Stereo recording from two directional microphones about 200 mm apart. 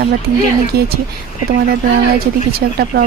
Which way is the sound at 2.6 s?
50° right (ahead or behind).